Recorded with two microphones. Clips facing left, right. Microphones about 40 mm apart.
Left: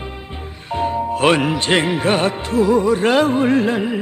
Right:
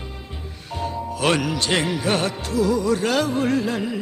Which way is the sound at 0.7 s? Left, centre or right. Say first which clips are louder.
Left 8 dB; left.